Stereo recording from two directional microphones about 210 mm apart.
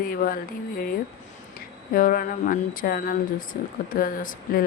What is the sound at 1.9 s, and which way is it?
Speech, 40° left (ahead or behind).